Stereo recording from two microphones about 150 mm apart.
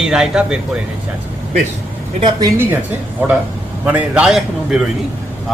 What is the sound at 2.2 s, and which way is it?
Speech, 25° right (ahead or behind).